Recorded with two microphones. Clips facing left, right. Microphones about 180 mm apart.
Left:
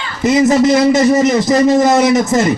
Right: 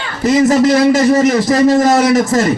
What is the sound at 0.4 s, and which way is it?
A man's voice, 15° left (ahead or behind).